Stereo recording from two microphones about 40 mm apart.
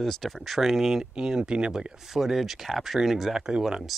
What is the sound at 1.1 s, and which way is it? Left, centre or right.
Speech, right.